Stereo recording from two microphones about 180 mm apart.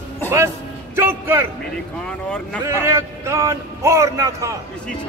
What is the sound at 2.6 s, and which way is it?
A man's voice, 15° right (ahead or behind).